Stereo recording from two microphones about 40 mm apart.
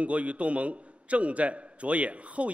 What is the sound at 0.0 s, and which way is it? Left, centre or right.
A man's voice, right.